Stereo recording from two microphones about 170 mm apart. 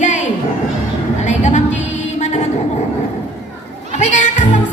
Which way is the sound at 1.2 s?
45° left (ahead or behind).